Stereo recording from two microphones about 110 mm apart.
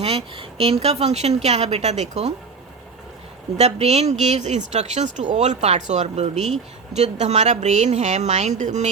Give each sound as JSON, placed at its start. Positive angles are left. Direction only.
{"t": 0.0, "sound": "a woman's voice", "side_deg": -65}
{"t": 3.6, "sound": "speech", "side_deg": -80}